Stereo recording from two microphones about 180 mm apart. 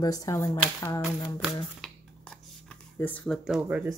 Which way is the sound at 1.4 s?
5° left (ahead or behind).